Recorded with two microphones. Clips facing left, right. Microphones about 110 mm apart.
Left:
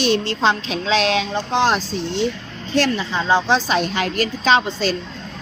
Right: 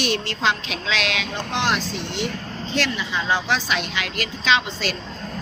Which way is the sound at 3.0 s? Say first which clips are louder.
Left 5 dB; 30° left (ahead or behind).